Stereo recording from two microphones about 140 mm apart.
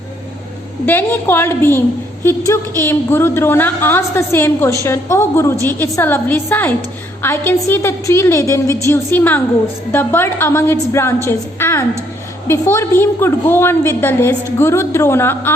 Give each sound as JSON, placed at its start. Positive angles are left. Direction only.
{"t": 0.9, "sound": "a woman's voice", "side_deg": 15}